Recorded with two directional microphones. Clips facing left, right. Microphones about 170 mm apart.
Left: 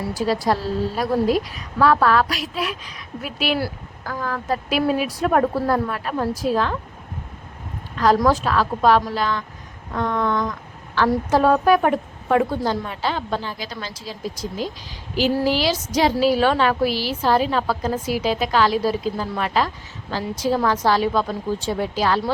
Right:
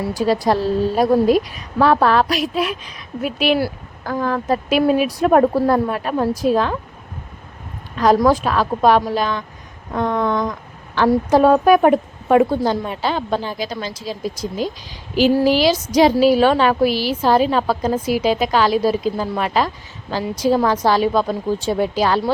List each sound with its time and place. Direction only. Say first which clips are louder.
0.1 s a woman's voice: right 3 dB; 20° right (ahead or behind)
7.9 s a woman's voice: right 3 dB; 15° right (ahead or behind)